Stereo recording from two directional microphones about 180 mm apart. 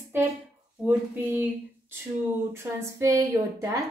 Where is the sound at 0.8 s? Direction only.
10° right (ahead or behind).